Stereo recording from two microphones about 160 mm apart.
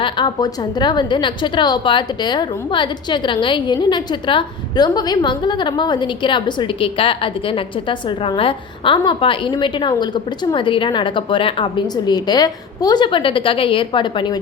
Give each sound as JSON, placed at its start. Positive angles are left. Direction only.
{"t": 0.0, "sound": "a woman's voice", "side_deg": 25}